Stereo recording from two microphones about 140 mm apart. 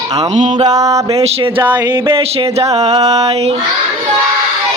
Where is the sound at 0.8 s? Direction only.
20° right (ahead or behind).